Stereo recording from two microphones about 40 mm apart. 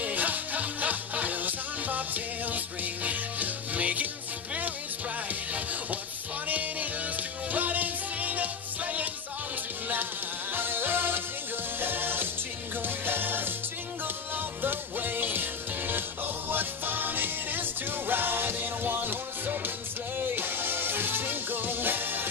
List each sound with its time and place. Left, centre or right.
0.0 s music: right
5.3 s music: right
10.5 s music: right
16.4 s music: right